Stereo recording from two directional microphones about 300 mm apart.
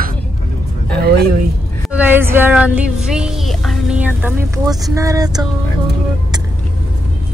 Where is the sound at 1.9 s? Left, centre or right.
Centre.